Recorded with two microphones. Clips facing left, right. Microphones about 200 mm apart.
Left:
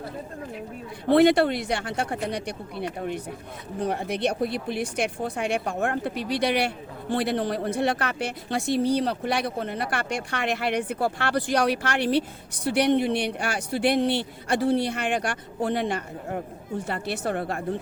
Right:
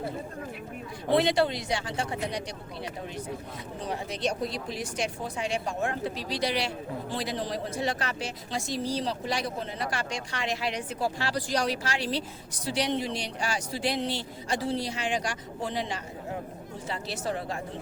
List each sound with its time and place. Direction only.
1.1 s a woman's voice: 60° left (ahead or behind)